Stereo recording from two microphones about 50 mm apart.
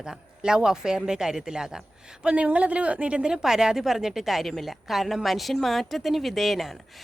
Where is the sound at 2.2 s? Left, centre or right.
Right.